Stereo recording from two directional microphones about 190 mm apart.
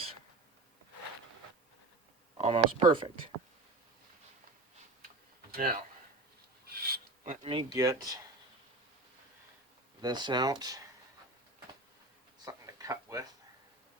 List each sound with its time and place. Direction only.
2.4 s speech: 30° right (ahead or behind)
5.5 s a sound: 45° right (ahead or behind)
6.7 s filing: 50° right (ahead or behind)
7.3 s speech: 25° right (ahead or behind)
10.0 s speech: 20° right (ahead or behind)
12.5 s a sound: 15° right (ahead or behind)